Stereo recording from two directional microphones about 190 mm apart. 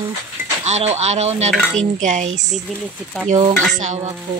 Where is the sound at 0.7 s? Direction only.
35° right (ahead or behind).